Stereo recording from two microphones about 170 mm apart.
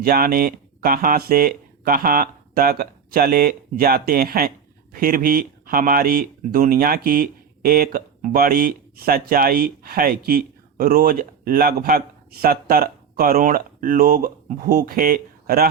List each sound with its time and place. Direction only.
0.0 s speech: 55° right (ahead or behind)